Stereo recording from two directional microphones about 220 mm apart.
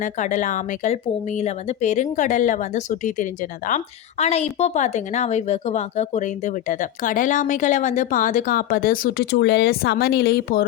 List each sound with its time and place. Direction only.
0.0 s a woman's voice: 35° left (ahead or behind)